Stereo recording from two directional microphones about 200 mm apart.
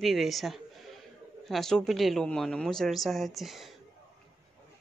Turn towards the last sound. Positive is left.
turn(degrees=0)  # may be behind; listen again after turning